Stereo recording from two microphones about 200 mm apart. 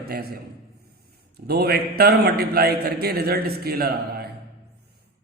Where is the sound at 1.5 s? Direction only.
50° right (ahead or behind).